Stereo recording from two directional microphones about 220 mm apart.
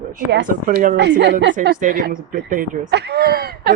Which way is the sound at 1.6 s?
40° right (ahead or behind).